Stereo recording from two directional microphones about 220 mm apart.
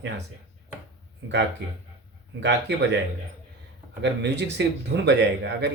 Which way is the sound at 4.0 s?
55° right (ahead or behind).